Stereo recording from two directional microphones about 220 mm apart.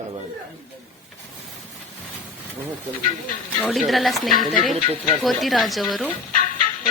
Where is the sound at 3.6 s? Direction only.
Centre (ahead or behind).